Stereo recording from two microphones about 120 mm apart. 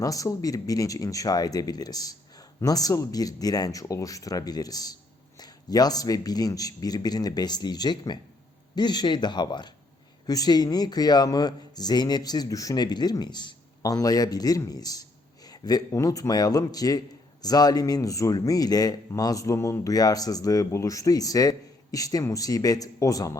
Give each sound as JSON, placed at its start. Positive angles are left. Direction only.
{"t": 0.0, "sound": "speech", "side_deg": 30}